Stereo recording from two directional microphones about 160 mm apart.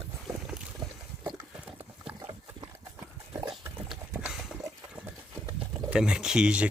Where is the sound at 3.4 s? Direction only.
20° right (ahead or behind).